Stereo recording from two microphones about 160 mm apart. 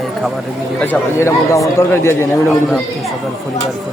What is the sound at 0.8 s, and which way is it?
A man's voice, 15° left (ahead or behind).